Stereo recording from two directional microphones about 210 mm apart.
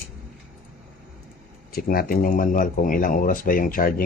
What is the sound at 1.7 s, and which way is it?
Speech, 45° left (ahead or behind).